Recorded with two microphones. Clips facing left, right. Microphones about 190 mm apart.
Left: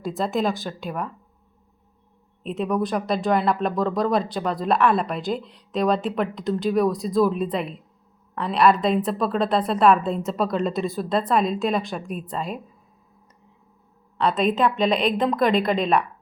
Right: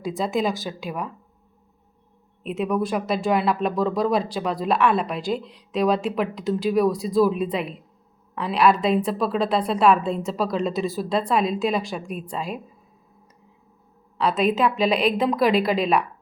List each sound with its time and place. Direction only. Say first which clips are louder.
0.0 s speech: even; centre (ahead or behind)
2.4 s speech: even; 5° right (ahead or behind)
14.2 s speech: even; centre (ahead or behind)